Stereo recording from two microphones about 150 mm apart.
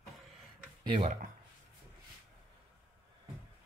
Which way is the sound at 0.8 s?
40° right (ahead or behind).